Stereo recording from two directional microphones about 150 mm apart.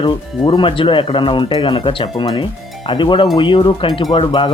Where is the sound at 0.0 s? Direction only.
35° left (ahead or behind).